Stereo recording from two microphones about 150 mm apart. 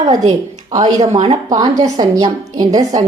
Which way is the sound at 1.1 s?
40° right (ahead or behind).